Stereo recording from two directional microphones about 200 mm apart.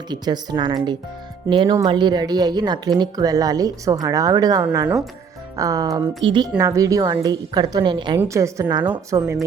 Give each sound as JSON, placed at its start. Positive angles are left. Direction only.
{"t": 0.1, "sound": "a woman's voice", "side_deg": -20}